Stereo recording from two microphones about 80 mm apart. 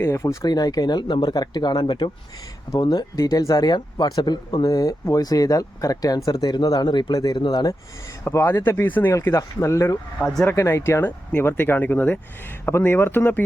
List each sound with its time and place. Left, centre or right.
0.0 s speech: left
0.4 s speech: left
7.1 s speech: left
8.3 s speech: left
9.1 s speech: left
10.2 s speech: centre
10.4 s speech: left